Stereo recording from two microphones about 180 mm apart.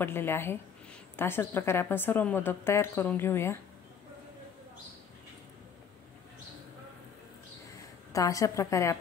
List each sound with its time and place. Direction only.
0.0 s a woman's voice: 10° left (ahead or behind)
8.1 s a woman's voice: 20° left (ahead or behind)